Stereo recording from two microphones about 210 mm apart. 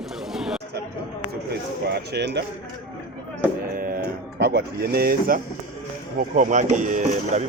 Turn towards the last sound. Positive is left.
turn(degrees=-35)  # may be behind; listen again after turning